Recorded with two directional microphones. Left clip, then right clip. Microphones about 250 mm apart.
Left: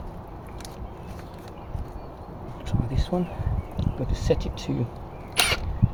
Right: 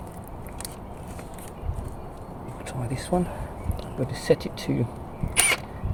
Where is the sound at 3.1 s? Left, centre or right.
Centre.